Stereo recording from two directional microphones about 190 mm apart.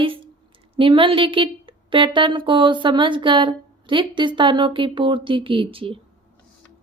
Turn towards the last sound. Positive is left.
turn(degrees=-30)  # may be behind; listen again after turning